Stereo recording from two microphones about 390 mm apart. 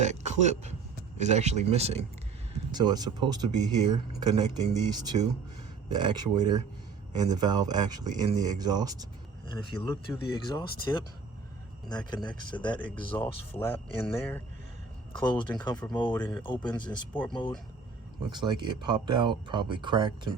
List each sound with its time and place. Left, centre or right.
0.0 s a man's voice: centre
9.5 s speech: centre
15.1 s speech: centre
18.3 s speech: centre